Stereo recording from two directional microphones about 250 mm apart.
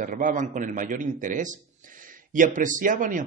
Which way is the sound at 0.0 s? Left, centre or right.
Right.